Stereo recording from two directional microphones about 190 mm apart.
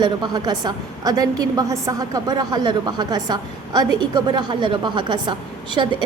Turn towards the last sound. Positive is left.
turn(degrees=-25)  # may be behind; listen again after turning